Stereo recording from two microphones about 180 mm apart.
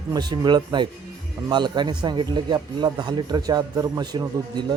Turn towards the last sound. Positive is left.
turn(degrees=-20)  # may be behind; listen again after turning